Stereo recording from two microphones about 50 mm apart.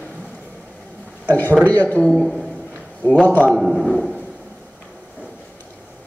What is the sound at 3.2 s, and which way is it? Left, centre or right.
Mantra, left.